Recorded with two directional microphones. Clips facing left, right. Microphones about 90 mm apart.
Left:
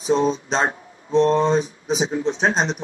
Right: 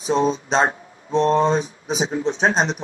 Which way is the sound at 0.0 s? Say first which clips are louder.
Even; 30° right (ahead or behind).